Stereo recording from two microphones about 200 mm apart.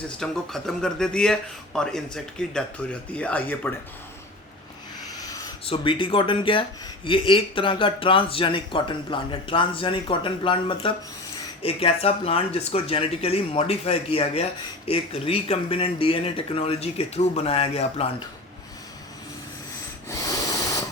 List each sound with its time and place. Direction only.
0.2 s speech: 5° left (ahead or behind)
5.6 s speech: 25° left (ahead or behind)
20.1 s a sound: 15° left (ahead or behind)